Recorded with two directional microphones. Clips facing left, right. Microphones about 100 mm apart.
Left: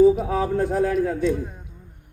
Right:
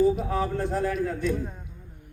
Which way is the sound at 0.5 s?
50° left (ahead or behind).